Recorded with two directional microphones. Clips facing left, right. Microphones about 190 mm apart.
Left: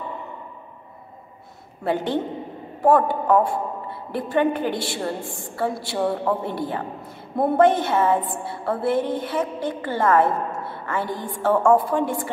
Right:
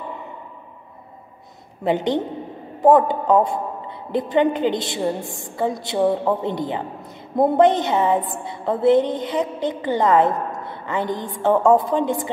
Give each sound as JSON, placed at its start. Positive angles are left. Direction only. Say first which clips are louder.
{"t": 1.9, "sound": "a woman's voice", "louder": "right 3 dB", "side_deg": -20}